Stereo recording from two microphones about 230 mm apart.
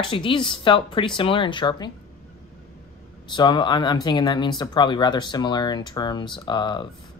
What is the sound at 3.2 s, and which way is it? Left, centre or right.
Speech, centre.